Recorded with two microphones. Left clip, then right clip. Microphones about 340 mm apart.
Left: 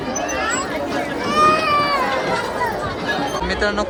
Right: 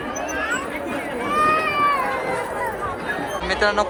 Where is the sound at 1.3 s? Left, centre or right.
Left.